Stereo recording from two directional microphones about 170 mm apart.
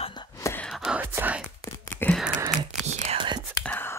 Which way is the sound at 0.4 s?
15° left (ahead or behind).